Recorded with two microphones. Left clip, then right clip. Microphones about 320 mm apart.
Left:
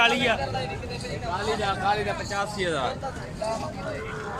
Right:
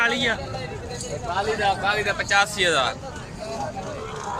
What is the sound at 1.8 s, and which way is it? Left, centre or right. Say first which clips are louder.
Speech: right 3 dB; right.